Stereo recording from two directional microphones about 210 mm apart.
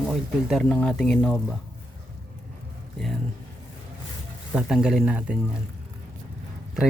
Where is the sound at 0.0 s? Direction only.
Centre (ahead or behind).